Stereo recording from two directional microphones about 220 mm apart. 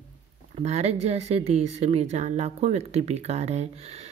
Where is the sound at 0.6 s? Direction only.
30° right (ahead or behind).